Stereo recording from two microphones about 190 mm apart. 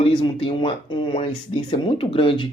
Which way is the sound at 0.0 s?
25° left (ahead or behind).